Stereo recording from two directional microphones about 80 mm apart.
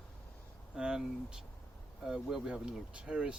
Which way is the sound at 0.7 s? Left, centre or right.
Centre.